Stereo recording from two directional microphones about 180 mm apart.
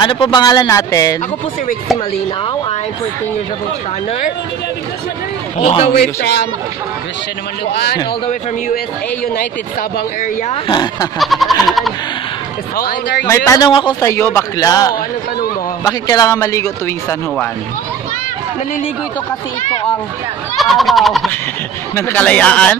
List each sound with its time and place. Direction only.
0.0 s speech: 25° left (ahead or behind)
5.6 s a man's voice: 35° left (ahead or behind)
7.7 s a man's voice: 65° left (ahead or behind)
9.3 s speech: 55° left (ahead or behind)
10.5 s speech: 25° left (ahead or behind)
11.1 s speech: centre (ahead or behind)
12.7 s speech: 55° left (ahead or behind)
13.3 s speech: 20° left (ahead or behind)
14.1 s a man's voice: 15° left (ahead or behind)
20.5 s speech: centre (ahead or behind)
21.9 s a man's voice: 10° left (ahead or behind)